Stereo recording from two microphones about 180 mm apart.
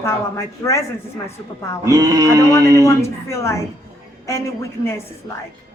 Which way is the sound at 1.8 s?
20° right (ahead or behind).